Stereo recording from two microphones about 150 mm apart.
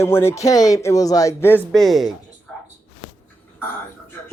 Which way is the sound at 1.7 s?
Centre (ahead or behind).